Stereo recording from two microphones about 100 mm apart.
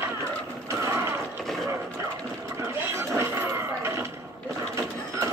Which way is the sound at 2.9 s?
25° right (ahead or behind).